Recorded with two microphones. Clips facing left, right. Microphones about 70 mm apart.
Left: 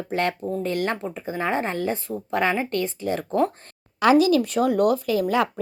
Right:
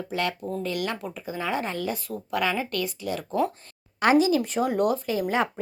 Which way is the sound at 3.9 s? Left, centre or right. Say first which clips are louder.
Left 3 dB; left.